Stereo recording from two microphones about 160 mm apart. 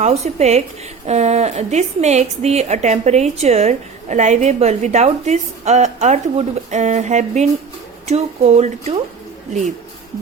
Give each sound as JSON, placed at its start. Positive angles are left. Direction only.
{"t": 0.0, "sound": "a woman's voice", "side_deg": -45}